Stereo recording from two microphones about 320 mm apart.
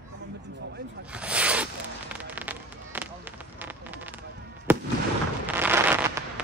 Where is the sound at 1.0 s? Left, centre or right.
Centre.